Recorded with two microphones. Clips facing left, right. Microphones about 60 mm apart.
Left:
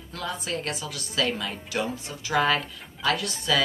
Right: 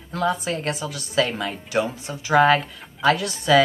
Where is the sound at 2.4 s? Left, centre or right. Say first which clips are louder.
Right 7 dB; right.